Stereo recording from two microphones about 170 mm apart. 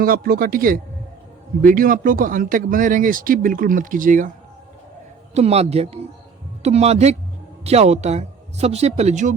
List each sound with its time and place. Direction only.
0.0 s speech: 60° right (ahead or behind)
5.3 s speech: 40° right (ahead or behind)